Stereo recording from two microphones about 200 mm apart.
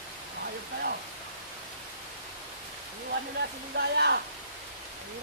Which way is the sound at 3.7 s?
55° right (ahead or behind).